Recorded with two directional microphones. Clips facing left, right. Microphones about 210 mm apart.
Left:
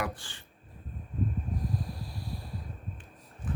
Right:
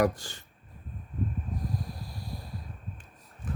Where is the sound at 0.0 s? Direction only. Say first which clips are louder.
Right 9 dB; 40° right (ahead or behind).